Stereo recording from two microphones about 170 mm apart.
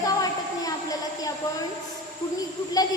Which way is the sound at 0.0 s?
20° left (ahead or behind).